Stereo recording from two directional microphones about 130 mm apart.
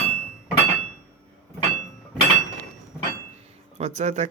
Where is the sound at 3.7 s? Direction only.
60° right (ahead or behind).